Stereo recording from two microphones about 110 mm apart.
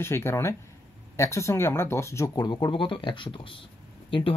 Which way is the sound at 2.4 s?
45° left (ahead or behind).